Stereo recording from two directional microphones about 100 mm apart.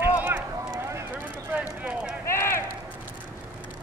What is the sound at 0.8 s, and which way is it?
Clip-clop, 25° right (ahead or behind).